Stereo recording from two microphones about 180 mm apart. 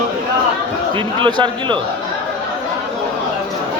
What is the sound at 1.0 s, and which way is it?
Speech, 25° right (ahead or behind).